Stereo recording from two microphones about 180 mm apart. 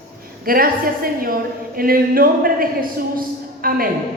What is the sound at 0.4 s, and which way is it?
A woman's voice, 55° right (ahead or behind).